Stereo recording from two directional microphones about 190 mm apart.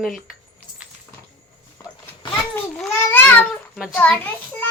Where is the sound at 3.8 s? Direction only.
5° left (ahead or behind).